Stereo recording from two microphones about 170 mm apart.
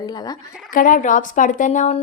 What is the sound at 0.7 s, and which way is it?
A woman's voice, 50° left (ahead or behind).